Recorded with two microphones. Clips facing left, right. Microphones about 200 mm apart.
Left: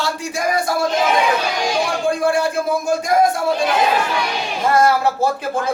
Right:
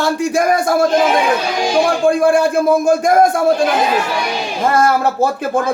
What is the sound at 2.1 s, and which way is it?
A woman's voice, 50° right (ahead or behind).